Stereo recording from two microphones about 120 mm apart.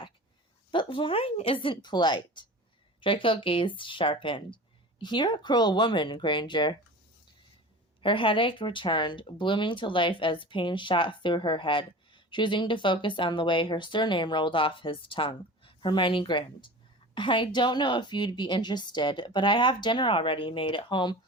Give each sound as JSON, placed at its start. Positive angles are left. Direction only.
{"t": 0.7, "sound": "a woman's voice", "side_deg": 45}
{"t": 8.0, "sound": "a woman's voice", "side_deg": 45}